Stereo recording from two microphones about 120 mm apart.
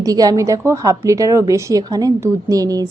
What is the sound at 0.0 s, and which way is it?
A woman's voice, 30° right (ahead or behind).